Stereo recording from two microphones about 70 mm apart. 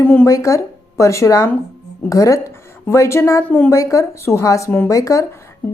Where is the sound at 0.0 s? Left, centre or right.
Left.